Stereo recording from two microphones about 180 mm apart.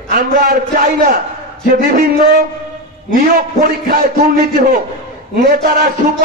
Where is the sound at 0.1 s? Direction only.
55° right (ahead or behind).